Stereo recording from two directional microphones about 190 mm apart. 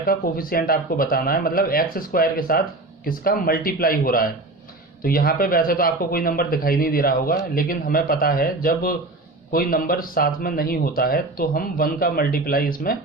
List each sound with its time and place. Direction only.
0.0 s speech: 50° left (ahead or behind)